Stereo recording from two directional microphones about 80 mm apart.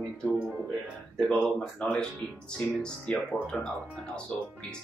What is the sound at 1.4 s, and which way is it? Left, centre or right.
Speech, centre.